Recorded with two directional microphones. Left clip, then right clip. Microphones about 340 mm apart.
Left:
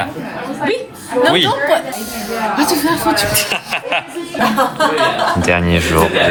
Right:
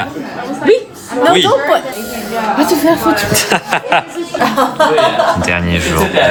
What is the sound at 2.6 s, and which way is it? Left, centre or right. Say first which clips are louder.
Speech: right 5 dB; centre.